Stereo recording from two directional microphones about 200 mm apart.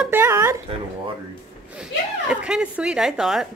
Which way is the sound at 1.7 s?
5° right (ahead or behind).